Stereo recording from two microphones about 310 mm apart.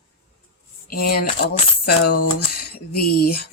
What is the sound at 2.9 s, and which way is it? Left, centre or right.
Speech, left.